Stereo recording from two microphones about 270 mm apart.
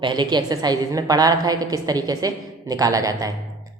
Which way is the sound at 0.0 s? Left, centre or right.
Centre.